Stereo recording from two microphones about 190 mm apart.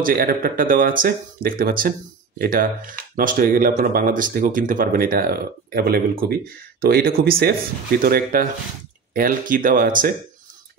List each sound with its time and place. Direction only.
0.0 s speech: 50° right (ahead or behind)